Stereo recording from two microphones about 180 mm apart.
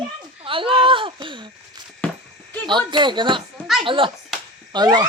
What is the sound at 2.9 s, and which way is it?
Speech, 25° right (ahead or behind).